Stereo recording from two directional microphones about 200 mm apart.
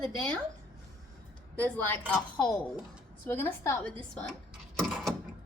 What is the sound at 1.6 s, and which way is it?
A child's voice, 5° left (ahead or behind).